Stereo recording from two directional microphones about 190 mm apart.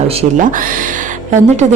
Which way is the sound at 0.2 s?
40° right (ahead or behind).